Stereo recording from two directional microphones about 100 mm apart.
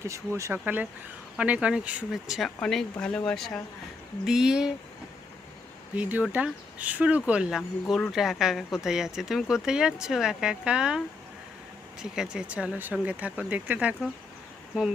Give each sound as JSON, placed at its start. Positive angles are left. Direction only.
{"t": 0.3, "sound": "speech", "side_deg": -30}
{"t": 0.6, "sound": "speech", "side_deg": -15}
{"t": 4.3, "sound": "speech", "side_deg": -5}
{"t": 6.0, "sound": "speech", "side_deg": -15}
{"t": 12.0, "sound": "speech", "side_deg": -5}